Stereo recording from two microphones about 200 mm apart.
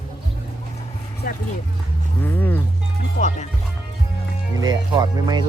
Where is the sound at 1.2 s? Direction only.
50° left (ahead or behind).